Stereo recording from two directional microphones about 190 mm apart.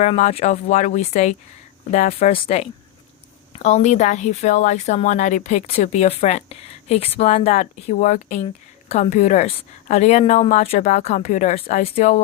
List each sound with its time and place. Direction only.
0.0 s a woman's voice: 35° left (ahead or behind)